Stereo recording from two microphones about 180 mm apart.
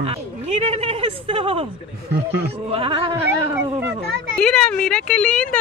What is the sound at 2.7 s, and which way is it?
Speech, 30° right (ahead or behind).